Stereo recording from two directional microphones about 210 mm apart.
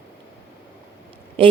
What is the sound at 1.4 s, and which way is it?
Speech, 25° right (ahead or behind).